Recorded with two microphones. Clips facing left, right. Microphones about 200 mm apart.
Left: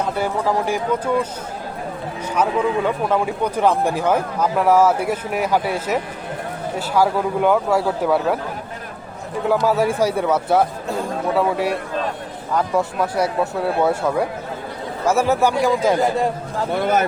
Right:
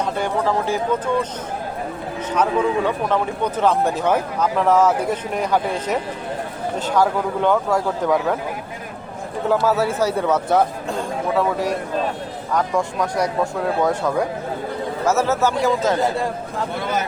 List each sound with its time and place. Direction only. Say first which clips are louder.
0.0 s speech: even; 10° left (ahead or behind)
3.1 s speech: left 1 dB; 10° left (ahead or behind)
9.5 s speech: left 1 dB; 15° left (ahead or behind)
16.7 s speech: left 7 dB; 55° left (ahead or behind)